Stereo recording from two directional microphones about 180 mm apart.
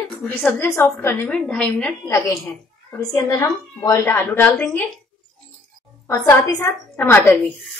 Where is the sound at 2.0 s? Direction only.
15° left (ahead or behind).